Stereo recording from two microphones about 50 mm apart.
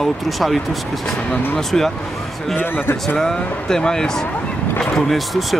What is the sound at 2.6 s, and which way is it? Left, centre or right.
Speech, left.